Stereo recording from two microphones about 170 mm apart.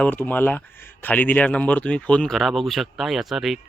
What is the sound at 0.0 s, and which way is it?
Speech, 10° left (ahead or behind).